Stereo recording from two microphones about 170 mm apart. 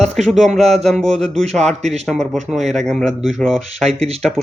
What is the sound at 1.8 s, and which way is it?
Speech, 40° right (ahead or behind).